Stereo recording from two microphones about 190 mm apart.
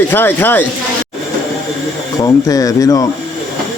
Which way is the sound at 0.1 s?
10° left (ahead or behind).